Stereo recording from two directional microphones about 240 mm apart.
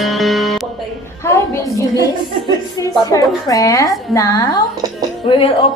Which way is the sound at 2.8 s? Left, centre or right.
Centre.